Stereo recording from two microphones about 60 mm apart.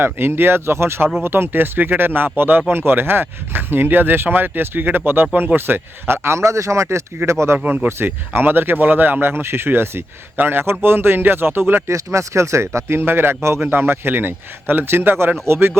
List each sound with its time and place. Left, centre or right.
0.0 s speech: right
11.9 s speech: right